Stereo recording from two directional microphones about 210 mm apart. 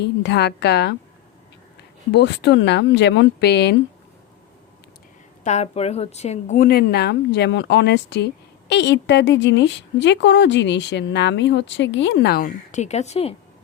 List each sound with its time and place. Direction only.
0.0 s a woman's voice: 55° left (ahead or behind)
2.1 s a woman's voice: 55° left (ahead or behind)
5.4 s a woman's voice: 35° left (ahead or behind)